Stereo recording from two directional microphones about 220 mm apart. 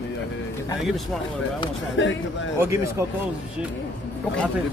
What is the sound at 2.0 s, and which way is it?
Speech, 55° left (ahead or behind).